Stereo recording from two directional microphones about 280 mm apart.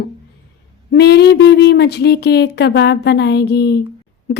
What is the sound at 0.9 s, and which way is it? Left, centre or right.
Speech, left.